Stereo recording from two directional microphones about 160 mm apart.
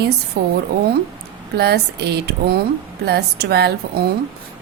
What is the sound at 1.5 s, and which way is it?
A woman's voice, 90° right.